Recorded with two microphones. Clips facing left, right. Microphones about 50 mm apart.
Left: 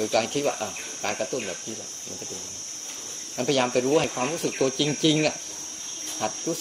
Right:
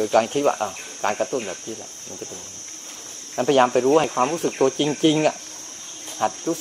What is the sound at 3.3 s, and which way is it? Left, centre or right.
Speech, right.